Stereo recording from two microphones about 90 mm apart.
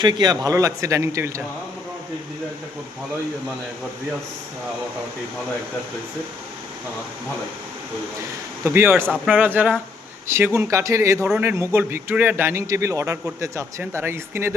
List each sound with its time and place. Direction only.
0.0 s speech: 50° right (ahead or behind)
0.5 s speech: 35° right (ahead or behind)
8.6 s a man's voice: 25° right (ahead or behind)
12.4 s a man's voice: 25° right (ahead or behind)